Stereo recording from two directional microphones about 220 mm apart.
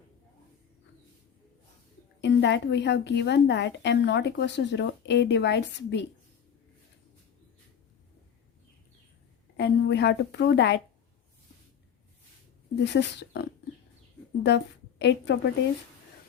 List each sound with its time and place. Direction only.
2.2 s a woman's voice: 50° left (ahead or behind)
9.6 s a woman's voice: 50° left (ahead or behind)
12.8 s a woman's voice: 50° left (ahead or behind)